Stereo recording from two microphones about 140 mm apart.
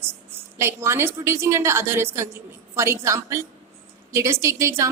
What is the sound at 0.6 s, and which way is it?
Speech, 20° right (ahead or behind).